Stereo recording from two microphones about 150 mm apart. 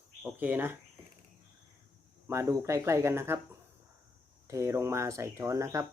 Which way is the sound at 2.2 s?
20° right (ahead or behind).